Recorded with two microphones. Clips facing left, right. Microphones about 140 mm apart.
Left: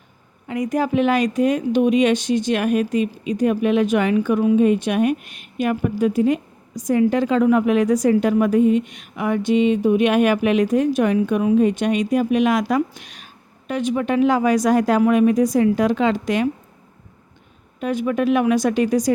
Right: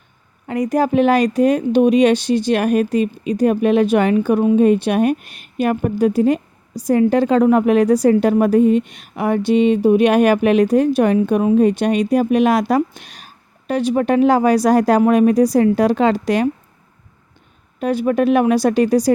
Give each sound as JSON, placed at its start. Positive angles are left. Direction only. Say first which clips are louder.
{"t": 0.4, "sound": "a woman's voice", "louder": "right 4 dB", "side_deg": -35}
{"t": 17.7, "sound": "a woman's voice", "louder": "right 4 dB", "side_deg": -40}